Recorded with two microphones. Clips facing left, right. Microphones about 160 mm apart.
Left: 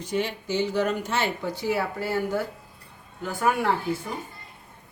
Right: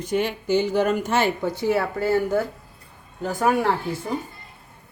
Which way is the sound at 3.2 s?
40° right (ahead or behind).